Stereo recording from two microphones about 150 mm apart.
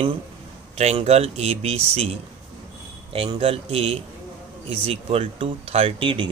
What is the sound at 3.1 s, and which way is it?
Speech, 40° right (ahead or behind).